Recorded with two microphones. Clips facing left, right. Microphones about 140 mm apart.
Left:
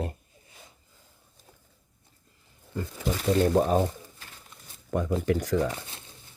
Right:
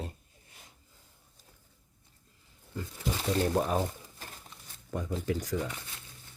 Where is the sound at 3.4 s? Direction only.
35° left (ahead or behind).